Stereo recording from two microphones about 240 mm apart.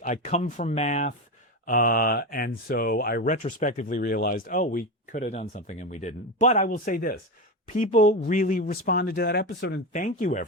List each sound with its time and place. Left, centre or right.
0.0 s speech: left
9.9 s speech: left